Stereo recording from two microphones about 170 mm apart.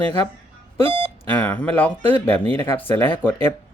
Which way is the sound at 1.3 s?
10° left (ahead or behind).